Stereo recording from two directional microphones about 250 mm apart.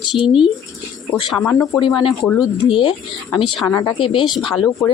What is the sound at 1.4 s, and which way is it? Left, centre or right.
Speech, centre.